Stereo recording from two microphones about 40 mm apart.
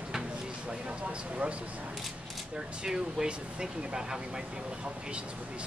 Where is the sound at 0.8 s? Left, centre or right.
Right.